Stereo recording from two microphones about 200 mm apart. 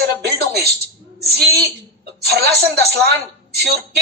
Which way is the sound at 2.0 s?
50° right (ahead or behind).